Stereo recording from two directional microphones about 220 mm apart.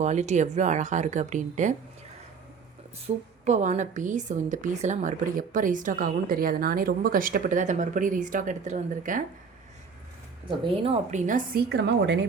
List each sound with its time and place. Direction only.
0.0 s a woman's voice: 30° right (ahead or behind)
3.1 s a woman's voice: 30° right (ahead or behind)
10.6 s a woman's voice: 25° right (ahead or behind)
11.7 s a woman's voice: 50° right (ahead or behind)